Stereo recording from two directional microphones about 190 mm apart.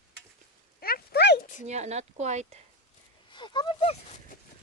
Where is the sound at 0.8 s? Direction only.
55° left (ahead or behind).